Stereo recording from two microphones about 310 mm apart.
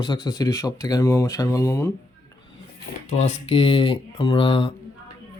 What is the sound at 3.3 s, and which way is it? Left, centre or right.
Speech, centre.